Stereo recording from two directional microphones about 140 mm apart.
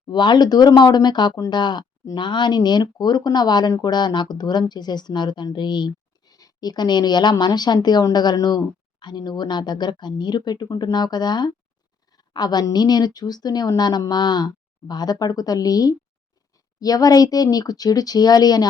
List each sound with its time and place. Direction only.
0.1 s a woman's voice: 30° left (ahead or behind)